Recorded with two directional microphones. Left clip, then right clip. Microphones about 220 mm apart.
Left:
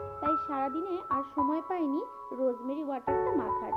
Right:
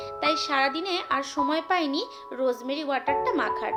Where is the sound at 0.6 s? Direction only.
15° left (ahead or behind).